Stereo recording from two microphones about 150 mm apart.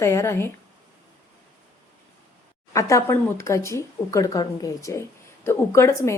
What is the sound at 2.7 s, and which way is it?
Speech, 20° left (ahead or behind).